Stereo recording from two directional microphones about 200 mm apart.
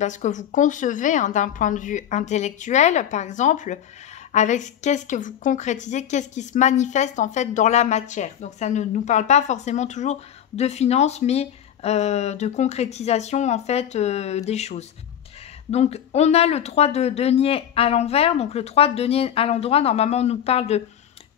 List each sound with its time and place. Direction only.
0.0 s a woman's voice: 35° left (ahead or behind)